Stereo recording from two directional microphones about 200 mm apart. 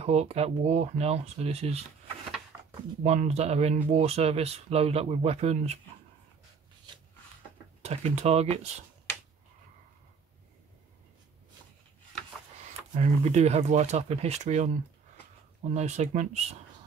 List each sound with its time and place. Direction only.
0.0 s speech: 30° right (ahead or behind)
3.0 s speech: 30° right (ahead or behind)
7.8 s speech: 30° right (ahead or behind)
12.9 s speech: 35° right (ahead or behind)